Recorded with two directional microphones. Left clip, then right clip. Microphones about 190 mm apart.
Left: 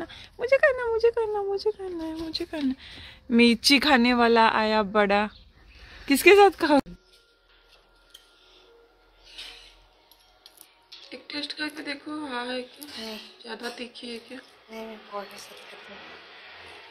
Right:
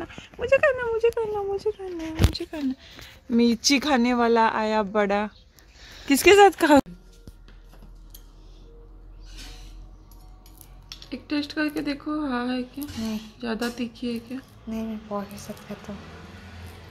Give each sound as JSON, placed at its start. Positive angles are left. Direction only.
{"t": 0.0, "sound": "speech", "side_deg": 10}
{"t": 2.3, "sound": "speech", "side_deg": 0}
{"t": 11.1, "sound": "speech", "side_deg": -35}
{"t": 14.7, "sound": "speech", "side_deg": -5}